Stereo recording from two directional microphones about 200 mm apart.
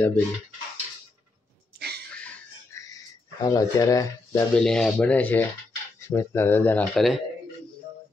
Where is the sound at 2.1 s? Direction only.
5° left (ahead or behind).